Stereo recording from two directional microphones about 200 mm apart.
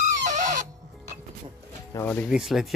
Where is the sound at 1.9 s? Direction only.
10° left (ahead or behind).